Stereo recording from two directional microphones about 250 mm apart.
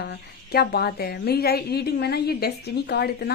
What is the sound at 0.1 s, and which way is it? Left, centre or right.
A woman's voice, left.